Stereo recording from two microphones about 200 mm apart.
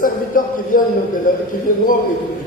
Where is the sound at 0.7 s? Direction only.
45° left (ahead or behind).